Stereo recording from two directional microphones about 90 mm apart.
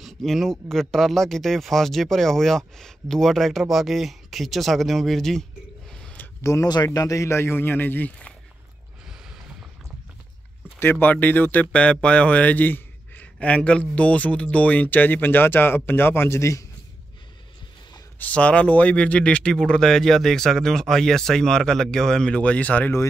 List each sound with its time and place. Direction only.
0.0 s speech: centre (ahead or behind)
5.9 s a sound: 10° left (ahead or behind)
6.4 s speech: 35° left (ahead or behind)
6.7 s speech: 45° left (ahead or behind); by 8.4 s 15° left (ahead or behind)
10.8 s a man's voice: 25° left (ahead or behind)
18.2 s a man's voice: 15° left (ahead or behind)